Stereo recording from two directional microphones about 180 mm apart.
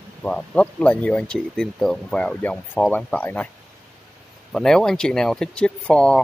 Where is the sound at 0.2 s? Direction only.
5° left (ahead or behind).